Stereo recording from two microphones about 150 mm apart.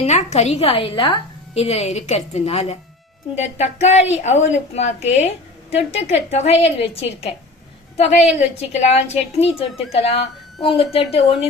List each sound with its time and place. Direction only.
0.0 s a woman's voice: 45° left (ahead or behind)